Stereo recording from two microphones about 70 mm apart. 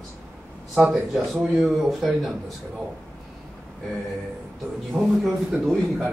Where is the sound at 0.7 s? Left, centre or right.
Centre.